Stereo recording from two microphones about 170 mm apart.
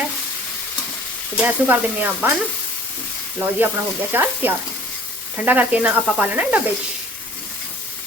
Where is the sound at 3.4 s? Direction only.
10° right (ahead or behind).